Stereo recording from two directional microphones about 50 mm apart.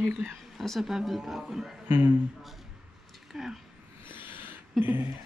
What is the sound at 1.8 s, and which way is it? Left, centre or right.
Speech, right.